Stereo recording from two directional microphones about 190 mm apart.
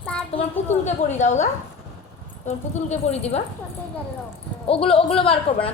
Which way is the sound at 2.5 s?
35° left (ahead or behind).